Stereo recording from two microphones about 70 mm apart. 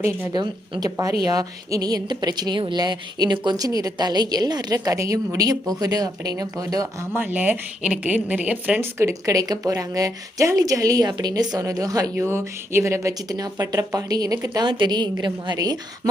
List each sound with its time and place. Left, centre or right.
0.3 s a woman's voice: right
7.0 s speech: right
9.0 s speech: right
12.1 s speech: right